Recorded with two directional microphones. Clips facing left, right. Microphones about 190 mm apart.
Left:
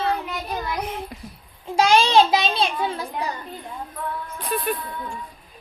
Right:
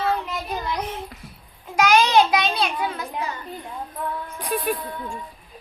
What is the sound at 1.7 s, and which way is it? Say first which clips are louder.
Child singing: left 1 dB; 30° left (ahead or behind).